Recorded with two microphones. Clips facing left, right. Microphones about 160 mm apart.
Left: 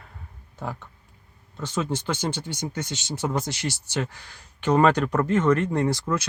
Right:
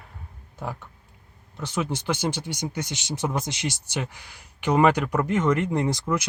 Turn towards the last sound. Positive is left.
turn(degrees=-15)  # may be behind; listen again after turning